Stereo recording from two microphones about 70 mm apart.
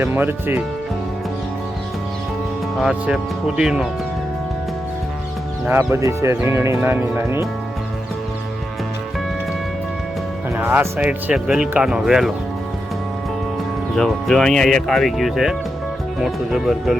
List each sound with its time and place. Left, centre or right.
0.0 s speech: right
2.9 s speech: centre
5.6 s speech: right
6.0 s speech: right
10.5 s speech: right
11.0 s speech: centre
11.8 s speech: centre
13.9 s speech: centre